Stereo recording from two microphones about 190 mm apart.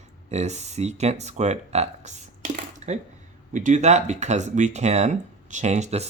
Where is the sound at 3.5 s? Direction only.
40° right (ahead or behind).